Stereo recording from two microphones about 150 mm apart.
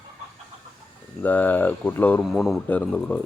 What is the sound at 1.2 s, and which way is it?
Speech, 10° left (ahead or behind).